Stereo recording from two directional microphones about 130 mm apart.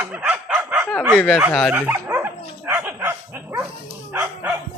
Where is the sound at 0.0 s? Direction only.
10° right (ahead or behind).